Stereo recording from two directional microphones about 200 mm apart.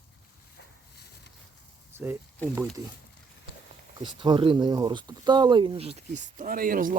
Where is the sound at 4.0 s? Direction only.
20° right (ahead or behind).